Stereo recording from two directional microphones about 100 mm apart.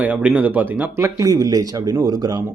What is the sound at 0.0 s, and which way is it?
Speech, 15° right (ahead or behind).